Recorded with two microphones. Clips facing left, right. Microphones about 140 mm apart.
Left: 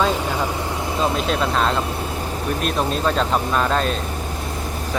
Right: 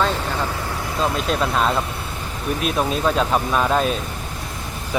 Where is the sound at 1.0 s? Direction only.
5° right (ahead or behind).